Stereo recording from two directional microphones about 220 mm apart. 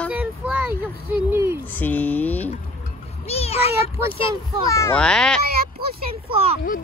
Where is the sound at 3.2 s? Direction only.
30° left (ahead or behind).